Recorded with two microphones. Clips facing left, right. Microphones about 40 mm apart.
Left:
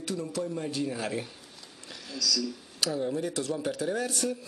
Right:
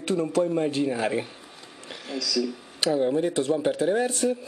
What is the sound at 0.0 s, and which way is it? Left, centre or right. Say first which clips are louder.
A man's voice: right 9 dB; right.